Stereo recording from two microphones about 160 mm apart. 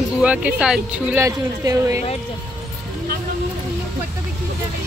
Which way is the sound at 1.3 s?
20° right (ahead or behind).